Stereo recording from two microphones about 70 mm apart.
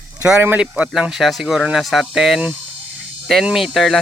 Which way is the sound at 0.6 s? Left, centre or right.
Centre.